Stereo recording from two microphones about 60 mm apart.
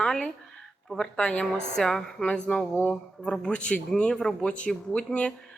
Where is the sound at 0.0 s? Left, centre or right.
Centre.